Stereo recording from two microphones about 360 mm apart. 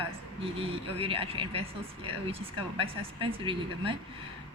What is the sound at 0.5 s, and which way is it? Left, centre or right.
Speech, centre.